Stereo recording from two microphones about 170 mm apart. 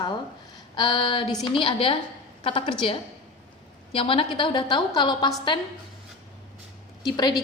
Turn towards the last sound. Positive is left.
turn(degrees=25)  # may be behind; listen again after turning